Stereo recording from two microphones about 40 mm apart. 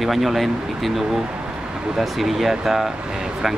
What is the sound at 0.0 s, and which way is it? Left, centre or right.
Speech, centre.